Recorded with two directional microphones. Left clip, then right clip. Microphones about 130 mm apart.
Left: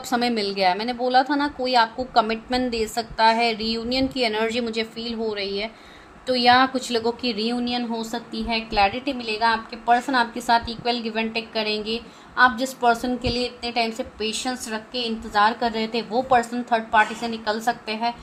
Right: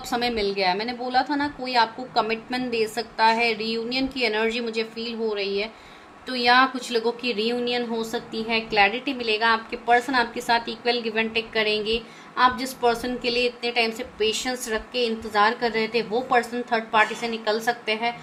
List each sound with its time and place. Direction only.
0.1 s a woman's voice: 55° left (ahead or behind); by 18.1 s 35° left (ahead or behind)